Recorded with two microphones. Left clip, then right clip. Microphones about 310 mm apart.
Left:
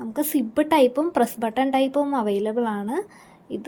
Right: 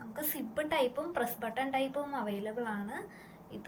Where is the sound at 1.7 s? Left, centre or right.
Centre.